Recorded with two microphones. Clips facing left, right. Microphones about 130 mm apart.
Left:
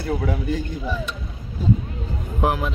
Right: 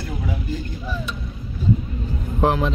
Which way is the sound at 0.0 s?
60° left (ahead or behind).